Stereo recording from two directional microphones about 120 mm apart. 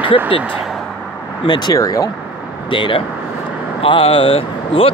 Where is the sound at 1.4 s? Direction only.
35° left (ahead or behind).